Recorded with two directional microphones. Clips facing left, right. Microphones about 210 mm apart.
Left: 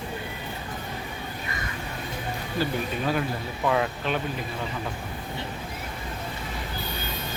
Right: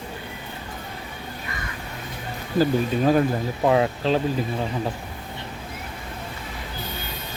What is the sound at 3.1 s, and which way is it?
Speech, 40° right (ahead or behind).